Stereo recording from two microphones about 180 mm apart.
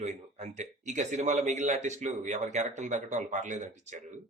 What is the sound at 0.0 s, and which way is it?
Speech, 40° right (ahead or behind).